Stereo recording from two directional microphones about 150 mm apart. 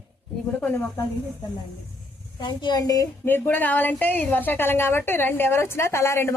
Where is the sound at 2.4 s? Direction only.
30° left (ahead or behind).